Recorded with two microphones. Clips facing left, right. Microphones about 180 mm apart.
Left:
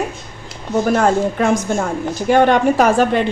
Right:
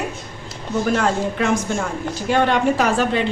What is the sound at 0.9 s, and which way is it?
A woman's voice, 45° left (ahead or behind).